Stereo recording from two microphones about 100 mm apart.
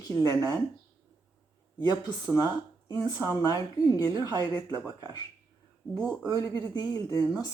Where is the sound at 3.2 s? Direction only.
35° left (ahead or behind).